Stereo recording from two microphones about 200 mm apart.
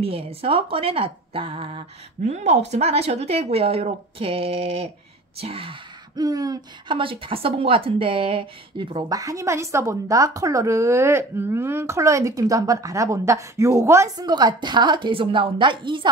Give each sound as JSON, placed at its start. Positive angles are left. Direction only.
{"t": 0.0, "sound": "speech", "side_deg": -30}